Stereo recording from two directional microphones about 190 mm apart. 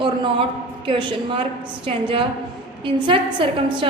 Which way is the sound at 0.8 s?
25° right (ahead or behind).